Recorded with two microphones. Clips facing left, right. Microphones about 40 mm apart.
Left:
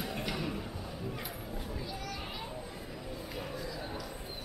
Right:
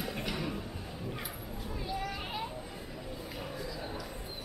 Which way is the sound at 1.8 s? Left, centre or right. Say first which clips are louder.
Right 3 dB; right.